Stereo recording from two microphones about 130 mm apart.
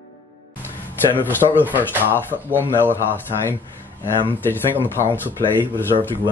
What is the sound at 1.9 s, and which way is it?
Speech, 15° right (ahead or behind).